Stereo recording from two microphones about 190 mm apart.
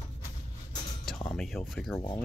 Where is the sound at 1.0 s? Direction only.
5° left (ahead or behind).